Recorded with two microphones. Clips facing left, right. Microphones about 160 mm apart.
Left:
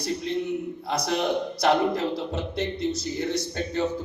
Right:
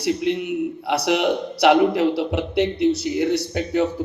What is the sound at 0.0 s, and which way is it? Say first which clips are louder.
A man's voice: right 6 dB; 70° right (ahead or behind).